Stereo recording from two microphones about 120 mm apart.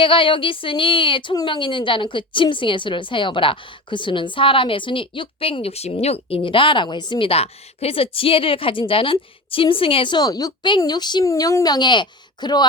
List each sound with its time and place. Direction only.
0.0 s a woman's voice: 45° left (ahead or behind)